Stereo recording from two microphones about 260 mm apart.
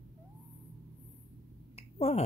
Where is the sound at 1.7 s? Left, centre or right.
Left.